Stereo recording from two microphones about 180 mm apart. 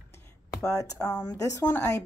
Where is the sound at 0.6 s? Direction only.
15° left (ahead or behind).